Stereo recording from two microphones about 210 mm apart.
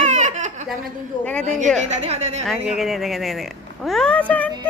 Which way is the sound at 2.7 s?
Centre (ahead or behind).